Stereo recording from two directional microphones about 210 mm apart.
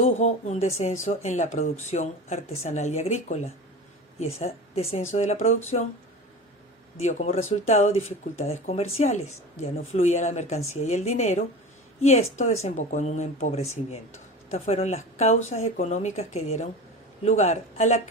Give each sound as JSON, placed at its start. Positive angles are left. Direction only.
{"t": 0.0, "sound": "speech", "side_deg": 35}
{"t": 7.0, "sound": "speech", "side_deg": 30}